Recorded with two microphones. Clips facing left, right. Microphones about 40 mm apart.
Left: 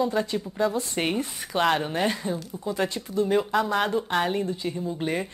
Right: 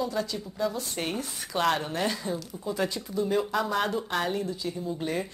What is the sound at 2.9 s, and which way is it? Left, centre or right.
Speech, left.